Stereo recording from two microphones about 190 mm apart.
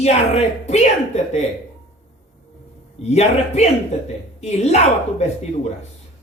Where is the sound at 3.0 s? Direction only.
35° left (ahead or behind).